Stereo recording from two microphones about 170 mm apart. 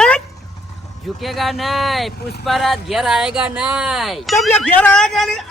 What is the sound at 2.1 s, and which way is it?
Speech, 70° left (ahead or behind).